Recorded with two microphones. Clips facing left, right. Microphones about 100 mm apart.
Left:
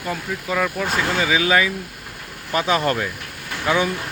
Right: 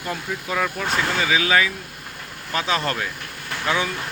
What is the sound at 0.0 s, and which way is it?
Speech, centre (ahead or behind).